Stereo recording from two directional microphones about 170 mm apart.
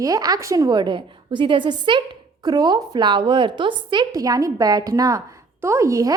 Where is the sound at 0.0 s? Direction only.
20° right (ahead or behind).